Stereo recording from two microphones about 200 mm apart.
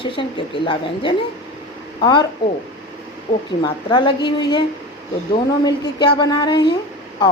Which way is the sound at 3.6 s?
20° left (ahead or behind).